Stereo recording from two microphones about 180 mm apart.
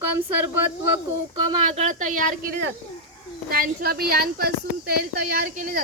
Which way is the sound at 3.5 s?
55° right (ahead or behind).